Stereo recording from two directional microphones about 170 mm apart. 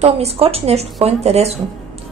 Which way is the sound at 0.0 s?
35° right (ahead or behind).